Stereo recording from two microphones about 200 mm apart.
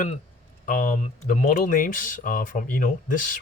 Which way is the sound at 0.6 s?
40° left (ahead or behind).